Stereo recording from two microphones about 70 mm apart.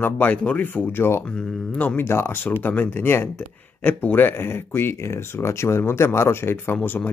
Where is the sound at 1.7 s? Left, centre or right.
Left.